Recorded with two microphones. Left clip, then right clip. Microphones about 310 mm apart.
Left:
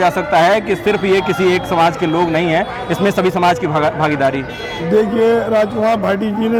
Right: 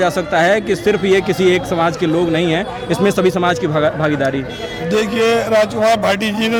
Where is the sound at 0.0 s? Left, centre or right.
Centre.